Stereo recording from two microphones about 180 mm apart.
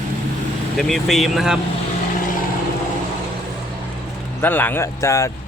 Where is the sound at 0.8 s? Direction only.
Centre (ahead or behind).